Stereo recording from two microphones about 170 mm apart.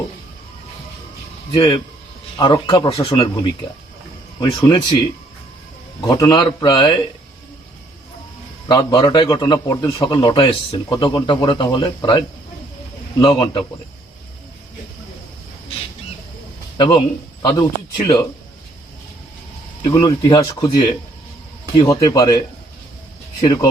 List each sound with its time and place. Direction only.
1.5 s a man's voice: 25° left (ahead or behind)
6.1 s a man's voice: 20° left (ahead or behind)
8.6 s a man's voice: 20° left (ahead or behind)
17.4 s speech: 25° left (ahead or behind)
19.8 s a man's voice: 20° left (ahead or behind)